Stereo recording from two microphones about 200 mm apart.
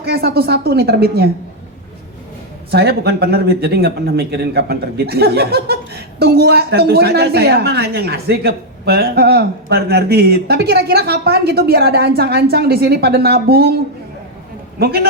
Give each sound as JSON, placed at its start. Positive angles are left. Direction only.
{"t": 0.0, "sound": "speech", "side_deg": -55}
{"t": 2.7, "sound": "speech", "side_deg": -55}
{"t": 14.8, "sound": "speech", "side_deg": -50}